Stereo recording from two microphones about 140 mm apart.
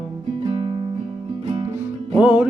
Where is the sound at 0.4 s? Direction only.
40° right (ahead or behind).